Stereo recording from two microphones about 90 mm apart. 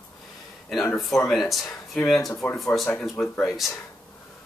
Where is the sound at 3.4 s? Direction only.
Centre (ahead or behind).